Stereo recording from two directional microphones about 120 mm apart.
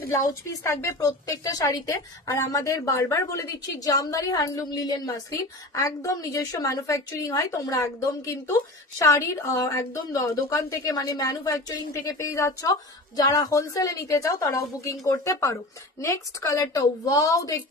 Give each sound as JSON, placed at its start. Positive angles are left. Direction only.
{"t": 0.1, "sound": "a woman's voice", "side_deg": 25}